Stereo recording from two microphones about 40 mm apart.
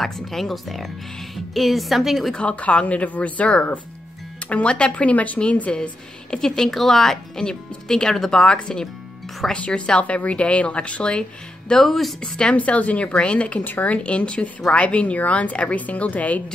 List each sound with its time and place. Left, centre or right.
0.0 s speech: centre
2.4 s a woman's voice: left
6.4 s speech: centre
11.7 s speech: centre
12.2 s speech: left
12.5 s a woman's voice: left